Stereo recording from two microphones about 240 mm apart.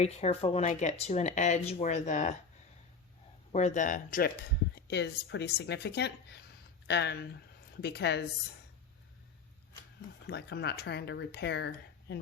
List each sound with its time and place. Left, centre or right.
0.0 s speech: left
3.5 s speech: left
4.7 s speech: left
10.2 s speech: left